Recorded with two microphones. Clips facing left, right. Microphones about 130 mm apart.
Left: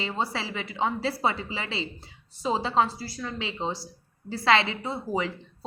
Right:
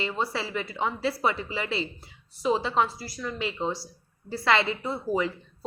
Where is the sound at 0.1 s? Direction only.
25° left (ahead or behind).